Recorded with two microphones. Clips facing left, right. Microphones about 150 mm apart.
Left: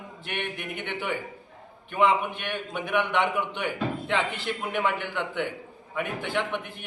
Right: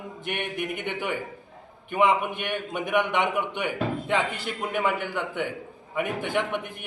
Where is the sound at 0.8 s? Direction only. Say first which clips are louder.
Right 2 dB; 15° right (ahead or behind).